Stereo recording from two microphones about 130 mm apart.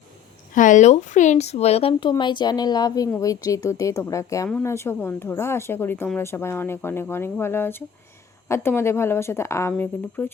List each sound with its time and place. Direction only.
0.5 s a woman's voice: 75° left (ahead or behind); by 10.3 s 15° left (ahead or behind)